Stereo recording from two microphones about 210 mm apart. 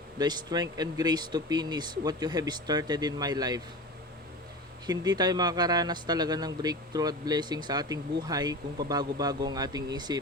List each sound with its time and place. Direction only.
0.2 s speech: 20° right (ahead or behind)
4.9 s speech: 20° right (ahead or behind)